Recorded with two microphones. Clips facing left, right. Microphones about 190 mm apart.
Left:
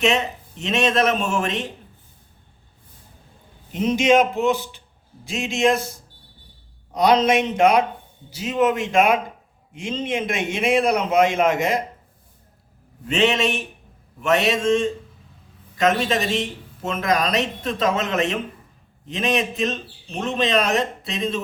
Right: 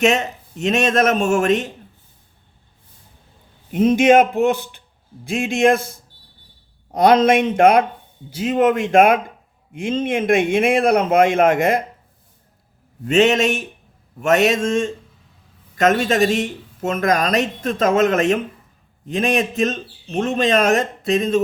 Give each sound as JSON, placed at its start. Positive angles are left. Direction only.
{"t": 0.6, "sound": "speech", "side_deg": -45}
{"t": 3.7, "sound": "a man's voice", "side_deg": -55}
{"t": 6.9, "sound": "speech", "side_deg": -50}
{"t": 13.1, "sound": "speech", "side_deg": -45}